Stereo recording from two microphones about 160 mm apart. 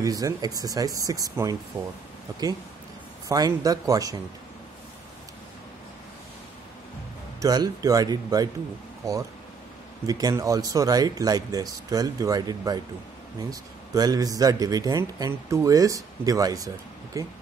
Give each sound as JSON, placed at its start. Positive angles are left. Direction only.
{"t": 0.0, "sound": "a man's voice", "side_deg": -20}
{"t": 3.3, "sound": "a man's voice", "side_deg": -20}
{"t": 7.4, "sound": "a man's voice", "side_deg": -25}